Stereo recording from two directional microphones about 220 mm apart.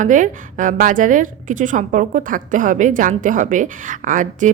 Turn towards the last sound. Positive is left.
turn(degrees=-35)  # may be behind; listen again after turning